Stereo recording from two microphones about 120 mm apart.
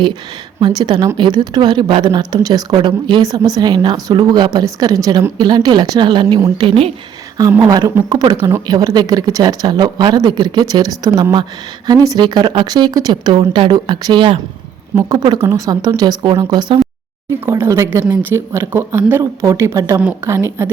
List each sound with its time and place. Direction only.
0.6 s a woman's voice: 35° right (ahead or behind)
6.6 s speech: 50° right (ahead or behind)
7.6 s a woman's voice: 35° right (ahead or behind)
8.4 s speech: 20° right (ahead or behind)
8.6 s a woman's voice: 35° right (ahead or behind)
17.4 s speech: 20° right (ahead or behind)